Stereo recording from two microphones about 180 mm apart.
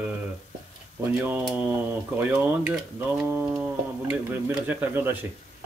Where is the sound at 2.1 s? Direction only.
10° right (ahead or behind).